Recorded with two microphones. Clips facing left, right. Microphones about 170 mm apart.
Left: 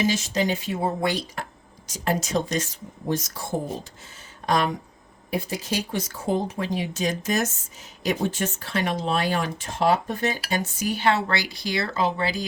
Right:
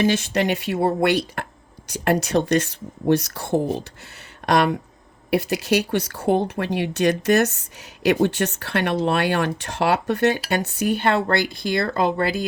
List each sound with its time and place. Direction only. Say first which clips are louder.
0.0 s speech: right 4 dB; 60° right (ahead or behind)